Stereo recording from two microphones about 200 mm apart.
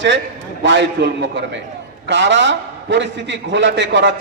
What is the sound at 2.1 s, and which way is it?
A man's voice, 65° right (ahead or behind).